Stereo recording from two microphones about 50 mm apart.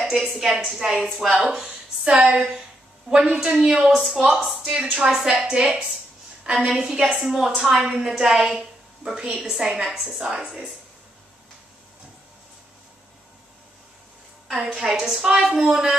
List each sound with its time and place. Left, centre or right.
0.1 s a woman's voice: centre
4.6 s a woman's voice: centre
14.5 s a woman's voice: centre